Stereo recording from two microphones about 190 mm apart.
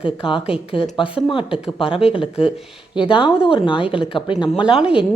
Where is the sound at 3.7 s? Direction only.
5° right (ahead or behind).